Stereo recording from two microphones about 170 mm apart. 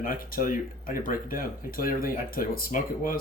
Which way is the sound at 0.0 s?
55° left (ahead or behind).